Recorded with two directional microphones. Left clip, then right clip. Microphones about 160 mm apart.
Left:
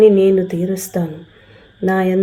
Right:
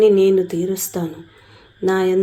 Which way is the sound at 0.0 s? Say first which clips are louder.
Left 2 dB; 35° right (ahead or behind).